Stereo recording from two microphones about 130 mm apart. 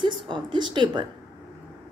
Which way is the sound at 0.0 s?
35° right (ahead or behind).